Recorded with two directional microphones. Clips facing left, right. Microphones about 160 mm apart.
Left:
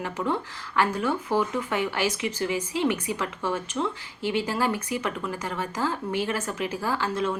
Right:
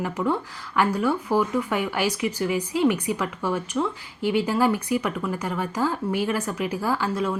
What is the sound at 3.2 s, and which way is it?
Speech, 15° right (ahead or behind).